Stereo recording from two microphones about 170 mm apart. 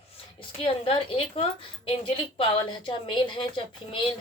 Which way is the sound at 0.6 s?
35° left (ahead or behind).